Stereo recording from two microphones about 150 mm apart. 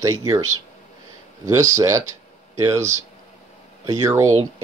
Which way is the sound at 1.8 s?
20° right (ahead or behind).